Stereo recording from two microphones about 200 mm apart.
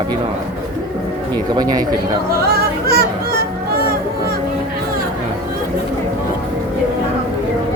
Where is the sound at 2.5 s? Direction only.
50° right (ahead or behind).